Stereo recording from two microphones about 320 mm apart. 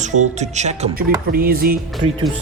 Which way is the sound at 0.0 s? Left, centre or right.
Right.